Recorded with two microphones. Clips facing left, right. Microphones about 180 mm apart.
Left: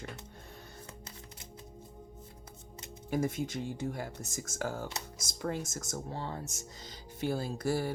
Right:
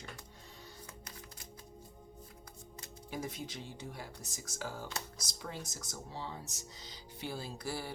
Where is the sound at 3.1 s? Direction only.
50° left (ahead or behind).